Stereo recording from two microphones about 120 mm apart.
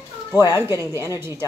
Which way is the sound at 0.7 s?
25° right (ahead or behind).